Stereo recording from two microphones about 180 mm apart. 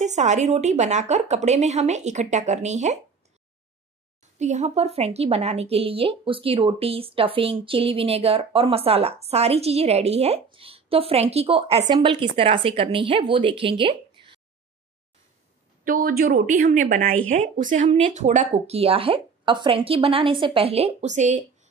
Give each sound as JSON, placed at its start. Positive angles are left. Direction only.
{"t": 0.0, "sound": "speech", "side_deg": -40}
{"t": 4.2, "sound": "speech", "side_deg": -40}
{"t": 15.8, "sound": "speech", "side_deg": -50}